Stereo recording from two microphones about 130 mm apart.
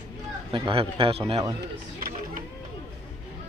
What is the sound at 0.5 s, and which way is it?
Speech, 40° right (ahead or behind).